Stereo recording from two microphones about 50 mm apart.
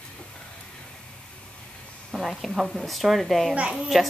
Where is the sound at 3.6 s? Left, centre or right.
Right.